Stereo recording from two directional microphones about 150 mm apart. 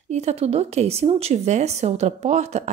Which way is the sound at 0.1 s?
45° right (ahead or behind).